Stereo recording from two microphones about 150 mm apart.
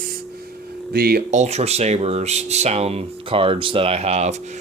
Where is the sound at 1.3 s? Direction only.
50° right (ahead or behind).